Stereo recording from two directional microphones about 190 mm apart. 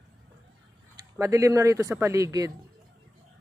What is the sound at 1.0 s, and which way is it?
Speech, 15° right (ahead or behind).